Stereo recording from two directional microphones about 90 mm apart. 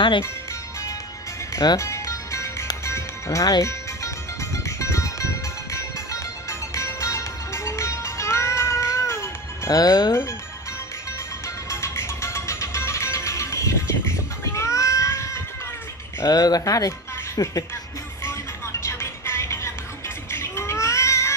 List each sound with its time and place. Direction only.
1.5 s music: 45° left (ahead or behind)
1.8 s music: 35° left (ahead or behind)
9.8 s speech: 50° left (ahead or behind)
11.4 s music: 30° left (ahead or behind)
16.2 s speech: 45° left (ahead or behind)
18.2 s music: 30° left (ahead or behind)
20.2 s baby cry: 30° left (ahead or behind)